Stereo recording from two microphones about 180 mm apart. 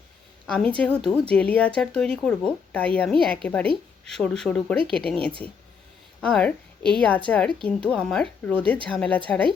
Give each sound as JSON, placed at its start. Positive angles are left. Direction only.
{"t": 0.4, "sound": "a woman's voice", "side_deg": 5}